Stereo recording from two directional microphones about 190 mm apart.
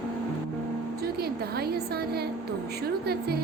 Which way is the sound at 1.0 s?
55° right (ahead or behind).